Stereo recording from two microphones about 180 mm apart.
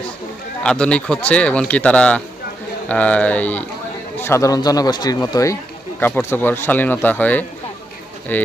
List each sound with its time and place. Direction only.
0.6 s speech: 5° left (ahead or behind)